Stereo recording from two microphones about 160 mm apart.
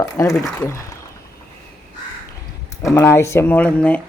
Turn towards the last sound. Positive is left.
turn(degrees=10)  # may be behind; listen again after turning